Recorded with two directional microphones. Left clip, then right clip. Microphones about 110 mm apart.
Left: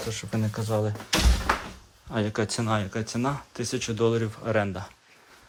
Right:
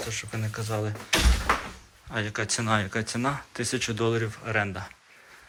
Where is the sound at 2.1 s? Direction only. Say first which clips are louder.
Left 1 dB; 45° left (ahead or behind).